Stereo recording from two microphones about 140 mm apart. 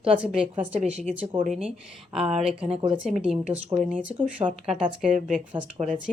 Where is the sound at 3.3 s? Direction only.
10° right (ahead or behind).